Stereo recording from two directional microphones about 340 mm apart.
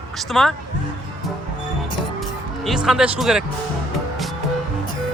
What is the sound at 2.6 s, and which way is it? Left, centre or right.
Speech, centre.